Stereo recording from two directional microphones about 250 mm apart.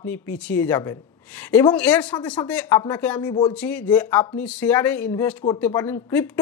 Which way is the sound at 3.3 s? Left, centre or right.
Centre.